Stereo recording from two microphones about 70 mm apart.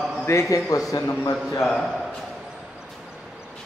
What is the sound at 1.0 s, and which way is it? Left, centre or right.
Speech, left.